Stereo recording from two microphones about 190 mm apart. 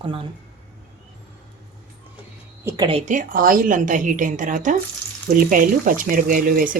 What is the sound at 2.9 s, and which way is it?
A woman's voice, 40° right (ahead or behind).